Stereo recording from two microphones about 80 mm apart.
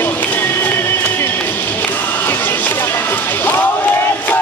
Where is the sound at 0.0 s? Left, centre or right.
Left.